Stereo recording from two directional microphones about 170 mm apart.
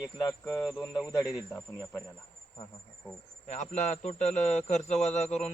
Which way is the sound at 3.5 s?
45° left (ahead or behind).